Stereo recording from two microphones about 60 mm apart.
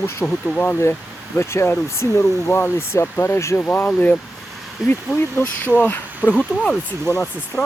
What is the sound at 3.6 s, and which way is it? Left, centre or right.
Speech, left.